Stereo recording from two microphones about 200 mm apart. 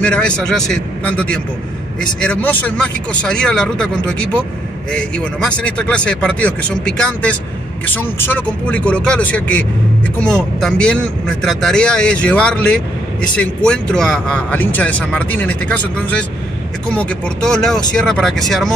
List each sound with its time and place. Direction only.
0.0 s speech: 5° left (ahead or behind)